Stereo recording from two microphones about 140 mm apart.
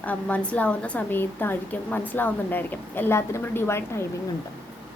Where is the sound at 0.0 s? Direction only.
10° left (ahead or behind).